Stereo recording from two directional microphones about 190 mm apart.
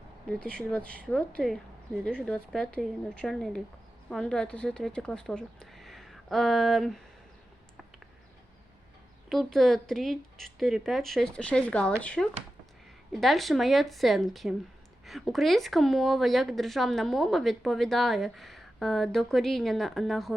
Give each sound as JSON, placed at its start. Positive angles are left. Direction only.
{"t": 0.3, "sound": "a woman's voice", "side_deg": 5}
{"t": 9.3, "sound": "a woman's voice", "side_deg": 0}